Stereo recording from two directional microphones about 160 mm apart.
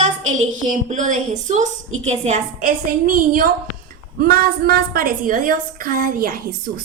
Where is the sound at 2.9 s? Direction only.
60° right (ahead or behind).